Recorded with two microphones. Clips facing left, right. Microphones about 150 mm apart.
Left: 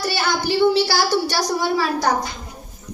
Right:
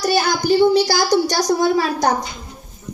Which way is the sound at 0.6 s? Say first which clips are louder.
Right 2 dB; 15° right (ahead or behind).